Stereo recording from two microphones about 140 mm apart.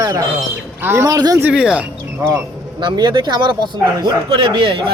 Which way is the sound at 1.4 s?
5° right (ahead or behind).